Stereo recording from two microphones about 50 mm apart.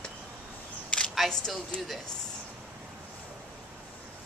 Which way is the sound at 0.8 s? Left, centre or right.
Left.